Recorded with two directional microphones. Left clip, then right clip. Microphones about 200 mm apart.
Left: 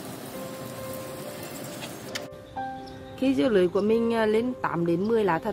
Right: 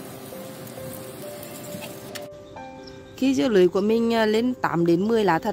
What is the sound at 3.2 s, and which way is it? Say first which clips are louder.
Speech: right 3 dB; 55° right (ahead or behind).